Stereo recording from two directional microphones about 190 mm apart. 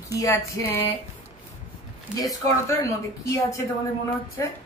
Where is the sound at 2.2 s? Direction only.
15° left (ahead or behind).